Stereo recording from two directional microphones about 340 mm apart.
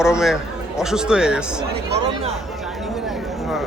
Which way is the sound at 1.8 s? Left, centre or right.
Right.